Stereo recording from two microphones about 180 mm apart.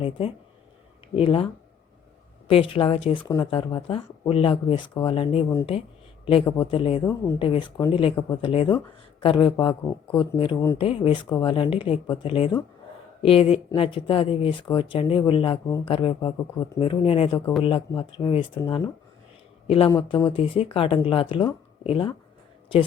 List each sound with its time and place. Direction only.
1.1 s speech: 30° left (ahead or behind)
2.5 s speech: 30° left (ahead or behind)
7.0 s a woman's voice: 15° left (ahead or behind)
7.3 s speech: 30° left (ahead or behind)
10.3 s speech: 30° left (ahead or behind)
15.6 s a woman's voice: 15° left (ahead or behind)
15.9 s speech: 30° left (ahead or behind)